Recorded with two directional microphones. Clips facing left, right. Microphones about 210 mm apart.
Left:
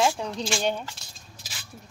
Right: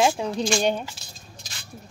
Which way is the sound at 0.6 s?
15° right (ahead or behind).